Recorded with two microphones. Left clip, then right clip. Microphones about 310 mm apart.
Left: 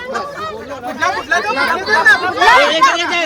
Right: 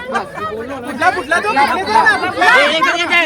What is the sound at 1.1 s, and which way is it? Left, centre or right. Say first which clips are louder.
Speech: right 1 dB; left.